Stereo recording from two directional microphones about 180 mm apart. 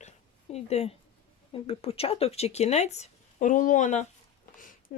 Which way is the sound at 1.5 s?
30° left (ahead or behind).